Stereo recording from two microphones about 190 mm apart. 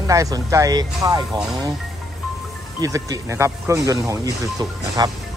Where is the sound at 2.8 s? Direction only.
15° right (ahead or behind).